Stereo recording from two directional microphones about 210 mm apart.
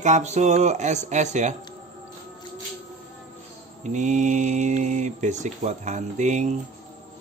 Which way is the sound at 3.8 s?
35° right (ahead or behind).